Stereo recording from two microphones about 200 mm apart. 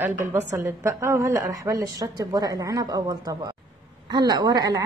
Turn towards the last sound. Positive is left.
turn(degrees=-20)  # may be behind; listen again after turning